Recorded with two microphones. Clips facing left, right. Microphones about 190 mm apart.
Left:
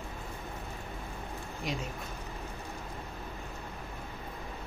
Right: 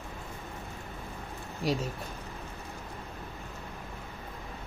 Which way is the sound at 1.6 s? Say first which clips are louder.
Right 7 dB; 35° right (ahead or behind).